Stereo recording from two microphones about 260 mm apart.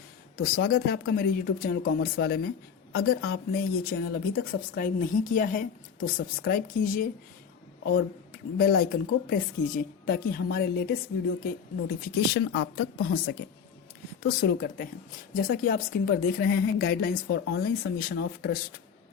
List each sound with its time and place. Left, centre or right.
0.3 s speech: left